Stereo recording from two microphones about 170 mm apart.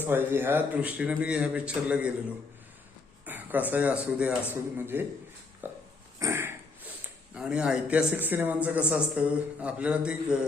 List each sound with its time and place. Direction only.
0.0 s speech: 10° right (ahead or behind)
3.2 s speech: 10° right (ahead or behind)
5.6 s a sound: 10° right (ahead or behind)
7.3 s speech: 5° right (ahead or behind)